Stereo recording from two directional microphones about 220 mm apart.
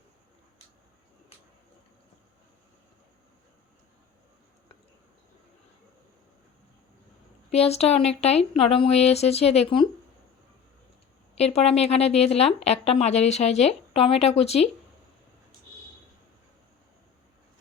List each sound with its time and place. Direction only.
7.5 s a woman's voice: 30° left (ahead or behind)
11.3 s a woman's voice: 30° left (ahead or behind)